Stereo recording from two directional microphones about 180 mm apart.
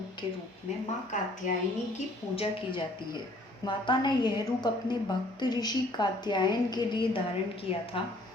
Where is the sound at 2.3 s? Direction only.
25° left (ahead or behind).